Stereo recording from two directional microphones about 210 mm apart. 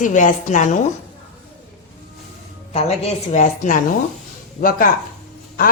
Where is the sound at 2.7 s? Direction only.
30° left (ahead or behind).